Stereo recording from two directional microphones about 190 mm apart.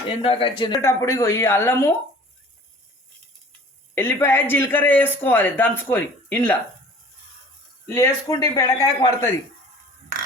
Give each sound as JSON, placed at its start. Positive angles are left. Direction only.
{"t": 0.2, "sound": "speech", "side_deg": 30}
{"t": 0.8, "sound": "speech", "side_deg": 15}
{"t": 3.9, "sound": "speech", "side_deg": 10}
{"t": 7.9, "sound": "speech", "side_deg": 15}